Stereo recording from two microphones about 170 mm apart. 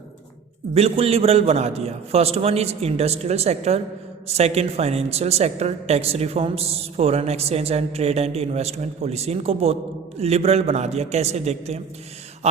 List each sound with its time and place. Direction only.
0.7 s a woman's voice: 35° right (ahead or behind)